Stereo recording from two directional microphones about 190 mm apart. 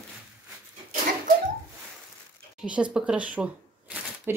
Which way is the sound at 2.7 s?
5° right (ahead or behind).